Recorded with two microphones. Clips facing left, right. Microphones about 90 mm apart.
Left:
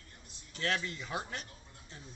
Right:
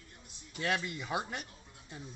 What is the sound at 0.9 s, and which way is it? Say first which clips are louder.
Speech: right 3 dB; 15° right (ahead or behind).